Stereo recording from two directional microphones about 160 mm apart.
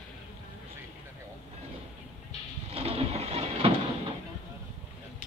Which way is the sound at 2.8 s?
40° right (ahead or behind).